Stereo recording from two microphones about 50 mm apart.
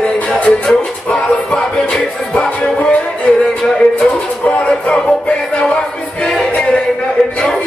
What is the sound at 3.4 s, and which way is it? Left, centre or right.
Music, centre.